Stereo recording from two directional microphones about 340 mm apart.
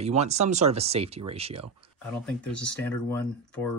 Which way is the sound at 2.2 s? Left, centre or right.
Centre.